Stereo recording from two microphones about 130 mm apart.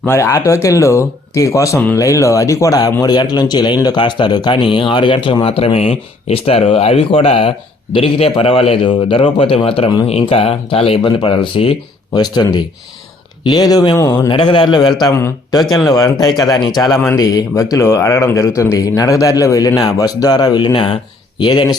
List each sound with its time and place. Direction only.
0.0 s a man's voice: 20° left (ahead or behind); by 21.8 s 35° left (ahead or behind)